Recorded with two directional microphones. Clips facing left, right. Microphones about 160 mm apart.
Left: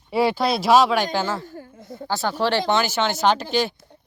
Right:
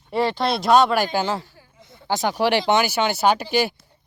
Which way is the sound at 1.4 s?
50° left (ahead or behind).